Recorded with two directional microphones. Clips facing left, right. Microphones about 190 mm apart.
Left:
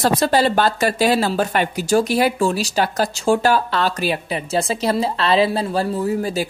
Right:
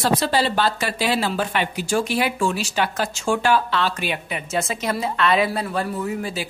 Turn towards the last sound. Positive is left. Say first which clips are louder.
# left 5 dB
turn(degrees=40)  # may be behind; listen again after turning